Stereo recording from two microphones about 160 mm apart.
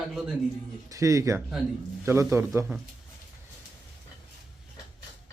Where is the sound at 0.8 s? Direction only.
20° right (ahead or behind).